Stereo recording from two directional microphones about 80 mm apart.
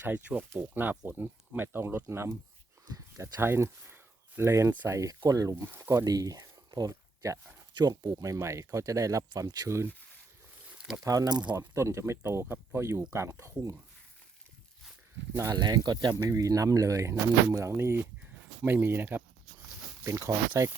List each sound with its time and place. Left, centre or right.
0.0 s speech: centre
2.8 s a sound: right
3.4 s speech: right
5.6 s speech: right
6.1 s speech: right
10.8 s snake: centre
11.0 s speech: right
11.7 s speech: right
15.5 s speech: right
16.3 s speech: right
20.1 s speech: right